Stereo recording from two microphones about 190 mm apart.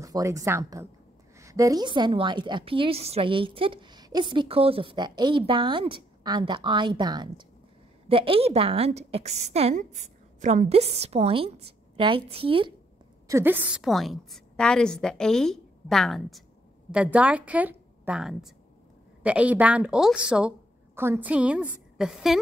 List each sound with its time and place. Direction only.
0.0 s a woman's voice: 15° right (ahead or behind)
13.3 s a woman's voice: 10° right (ahead or behind)